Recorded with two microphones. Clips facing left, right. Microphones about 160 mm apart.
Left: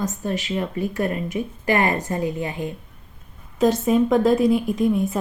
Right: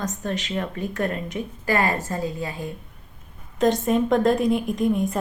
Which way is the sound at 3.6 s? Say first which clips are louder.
Left 2 dB; 5° left (ahead or behind).